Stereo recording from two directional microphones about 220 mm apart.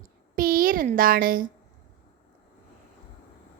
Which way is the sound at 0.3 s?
40° right (ahead or behind).